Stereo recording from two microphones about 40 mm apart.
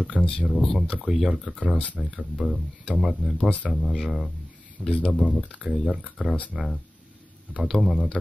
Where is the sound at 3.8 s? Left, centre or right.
Centre.